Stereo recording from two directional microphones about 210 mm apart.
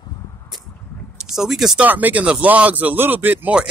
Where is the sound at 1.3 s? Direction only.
Centre (ahead or behind).